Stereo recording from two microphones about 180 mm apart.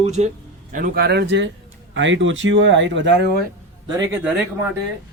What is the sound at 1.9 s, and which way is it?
Speech, 90° right.